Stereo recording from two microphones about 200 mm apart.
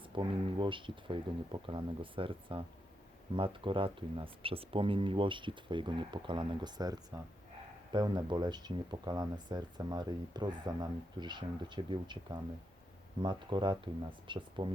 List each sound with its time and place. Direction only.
0.1 s speech: 25° right (ahead or behind)